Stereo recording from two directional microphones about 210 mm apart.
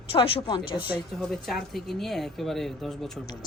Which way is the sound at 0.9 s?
Centre (ahead or behind).